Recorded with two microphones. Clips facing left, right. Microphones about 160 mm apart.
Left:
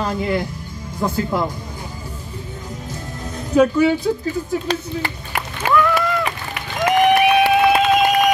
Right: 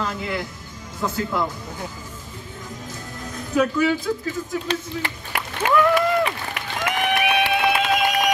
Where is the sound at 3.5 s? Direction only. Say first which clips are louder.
Left 5 dB; 30° left (ahead or behind).